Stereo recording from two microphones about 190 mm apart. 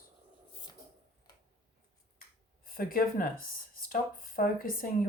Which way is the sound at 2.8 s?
50° left (ahead or behind).